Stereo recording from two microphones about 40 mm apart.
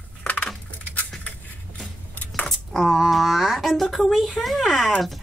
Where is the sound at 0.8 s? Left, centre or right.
Left.